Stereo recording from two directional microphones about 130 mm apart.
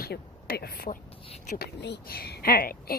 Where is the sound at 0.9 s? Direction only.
60° left (ahead or behind).